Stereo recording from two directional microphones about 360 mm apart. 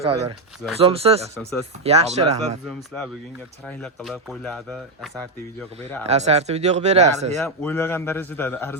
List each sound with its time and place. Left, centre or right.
0.0 s speech: centre
3.7 s speech: centre
6.1 s speech: centre
7.3 s speech: centre